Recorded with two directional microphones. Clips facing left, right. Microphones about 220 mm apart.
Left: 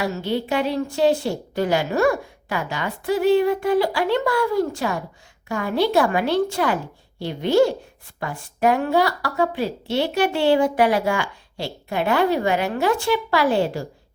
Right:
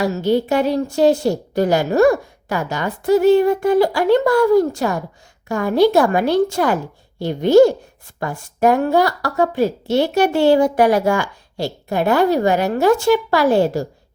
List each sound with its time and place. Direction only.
0.0 s a woman's voice: 40° right (ahead or behind)